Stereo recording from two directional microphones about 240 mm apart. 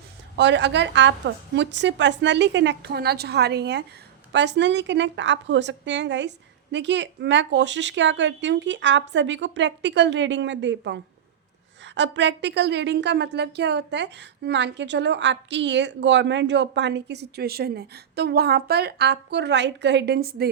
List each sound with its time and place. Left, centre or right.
0.3 s a woman's voice: right